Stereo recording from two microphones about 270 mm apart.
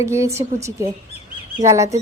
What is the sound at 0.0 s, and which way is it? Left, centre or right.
A woman's voice, centre.